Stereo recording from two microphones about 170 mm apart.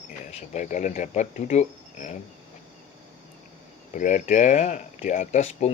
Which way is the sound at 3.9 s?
45° left (ahead or behind).